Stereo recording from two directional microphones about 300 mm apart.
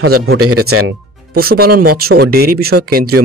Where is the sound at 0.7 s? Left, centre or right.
Right.